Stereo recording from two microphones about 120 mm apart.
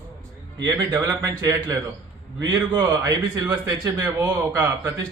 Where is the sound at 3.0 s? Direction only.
30° right (ahead or behind).